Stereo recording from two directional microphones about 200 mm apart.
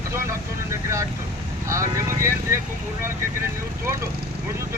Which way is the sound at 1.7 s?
15° right (ahead or behind).